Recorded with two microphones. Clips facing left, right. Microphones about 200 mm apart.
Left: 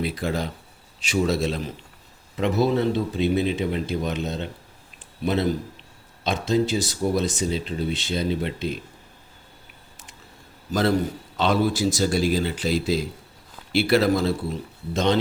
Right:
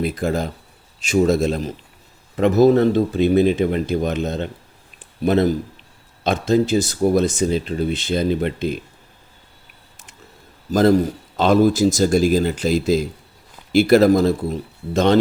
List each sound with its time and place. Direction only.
0.0 s speech: 45° right (ahead or behind)
10.7 s speech: 45° right (ahead or behind)